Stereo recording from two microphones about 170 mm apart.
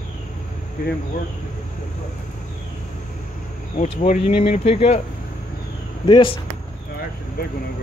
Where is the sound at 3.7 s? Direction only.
45° left (ahead or behind).